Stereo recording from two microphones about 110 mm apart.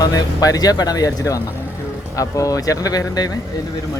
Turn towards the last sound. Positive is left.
turn(degrees=35)  # may be behind; listen again after turning